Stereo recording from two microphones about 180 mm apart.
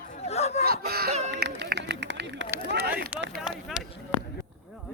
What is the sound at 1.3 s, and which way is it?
Run, 75° right (ahead or behind).